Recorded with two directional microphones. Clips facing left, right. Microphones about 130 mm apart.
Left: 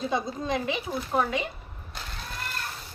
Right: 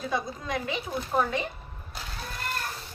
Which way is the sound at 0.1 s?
25° left (ahead or behind).